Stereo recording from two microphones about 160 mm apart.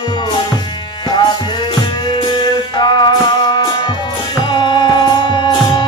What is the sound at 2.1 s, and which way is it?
Music, 30° left (ahead or behind).